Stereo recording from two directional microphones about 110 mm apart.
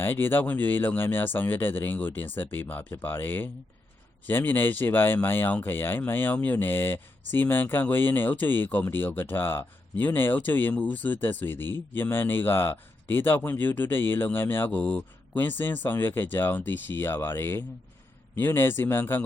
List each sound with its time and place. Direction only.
0.0 s speech: 20° left (ahead or behind)